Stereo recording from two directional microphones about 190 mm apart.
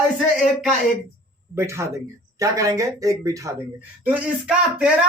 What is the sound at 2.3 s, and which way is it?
Speech, 15° right (ahead or behind).